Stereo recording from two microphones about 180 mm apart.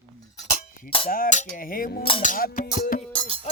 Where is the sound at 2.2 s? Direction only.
45° left (ahead or behind).